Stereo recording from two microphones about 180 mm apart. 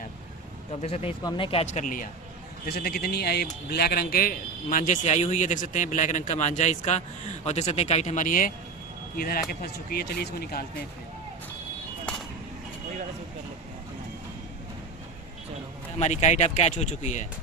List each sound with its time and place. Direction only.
0.7 s speech: 35° left (ahead or behind)
2.6 s a man's voice: 55° left (ahead or behind)
16.0 s speech: 40° left (ahead or behind)